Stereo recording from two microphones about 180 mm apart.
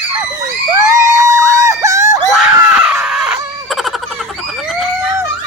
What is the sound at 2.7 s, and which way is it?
Screaming, 5° right (ahead or behind).